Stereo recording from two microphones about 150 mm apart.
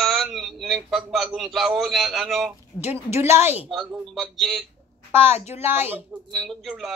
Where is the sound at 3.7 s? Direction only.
Centre (ahead or behind).